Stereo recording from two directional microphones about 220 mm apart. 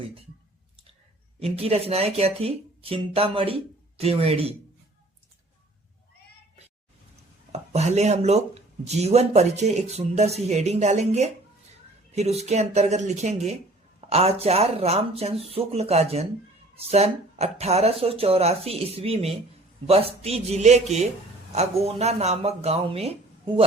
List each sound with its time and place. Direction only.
1.4 s speech: 25° right (ahead or behind)
7.5 s speech: 30° right (ahead or behind)